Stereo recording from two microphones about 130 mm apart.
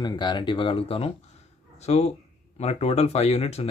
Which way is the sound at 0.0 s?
35° left (ahead or behind).